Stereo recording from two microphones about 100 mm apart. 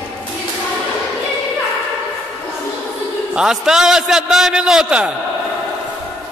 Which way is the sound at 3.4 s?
5° right (ahead or behind).